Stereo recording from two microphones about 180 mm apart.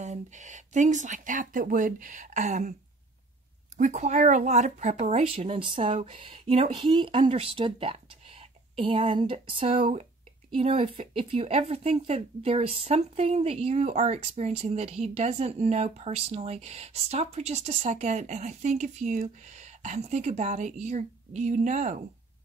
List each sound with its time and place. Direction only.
0.0 s speech: 40° right (ahead or behind)
3.7 s speech: 40° right (ahead or behind)